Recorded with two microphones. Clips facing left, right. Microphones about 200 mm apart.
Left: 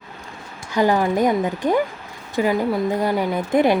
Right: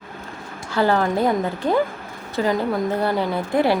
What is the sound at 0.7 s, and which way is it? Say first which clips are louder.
A woman's voice: left 1 dB; 15° left (ahead or behind).